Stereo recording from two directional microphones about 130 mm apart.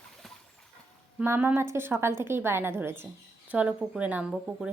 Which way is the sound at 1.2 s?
15° right (ahead or behind).